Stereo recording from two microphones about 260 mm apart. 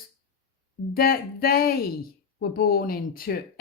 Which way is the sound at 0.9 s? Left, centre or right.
Left.